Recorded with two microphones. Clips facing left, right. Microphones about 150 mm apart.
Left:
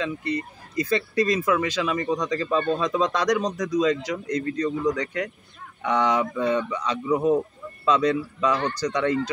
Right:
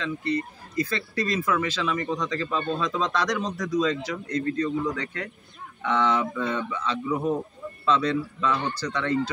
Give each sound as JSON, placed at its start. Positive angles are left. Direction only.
{"t": 0.0, "sound": "speech", "side_deg": 15}